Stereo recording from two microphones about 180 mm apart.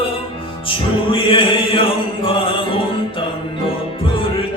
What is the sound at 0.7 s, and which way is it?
Music, 30° left (ahead or behind).